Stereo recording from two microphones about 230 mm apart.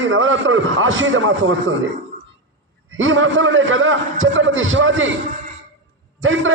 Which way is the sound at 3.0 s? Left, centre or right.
Right.